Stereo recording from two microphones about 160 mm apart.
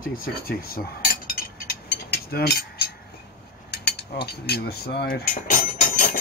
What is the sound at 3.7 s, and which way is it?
Cutlery, 90° left.